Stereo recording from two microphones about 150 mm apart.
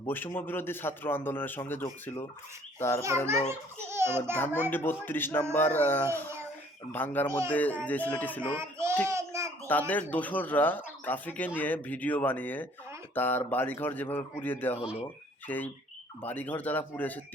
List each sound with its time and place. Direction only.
0.1 s a man's voice: 15° left (ahead or behind)
3.5 s a child's voice: 15° right (ahead or behind)
4.4 s a man's voice: 15° left (ahead or behind)
8.5 s child singing: 15° right (ahead or behind)
9.0 s a sound: 20° right (ahead or behind)
9.6 s a man's voice: 10° left (ahead or behind)